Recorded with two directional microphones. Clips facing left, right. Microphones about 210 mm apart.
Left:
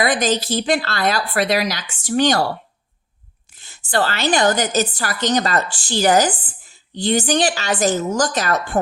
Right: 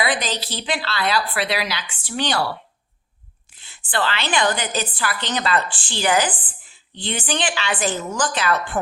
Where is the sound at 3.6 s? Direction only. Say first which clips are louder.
Left 4 dB; 45° left (ahead or behind).